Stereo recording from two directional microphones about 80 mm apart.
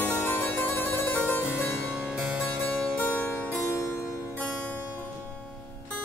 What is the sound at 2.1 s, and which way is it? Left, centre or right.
Harpsichord, centre.